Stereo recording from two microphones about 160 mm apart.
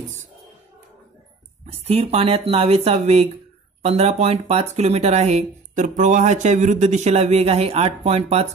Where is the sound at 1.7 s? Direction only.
40° right (ahead or behind).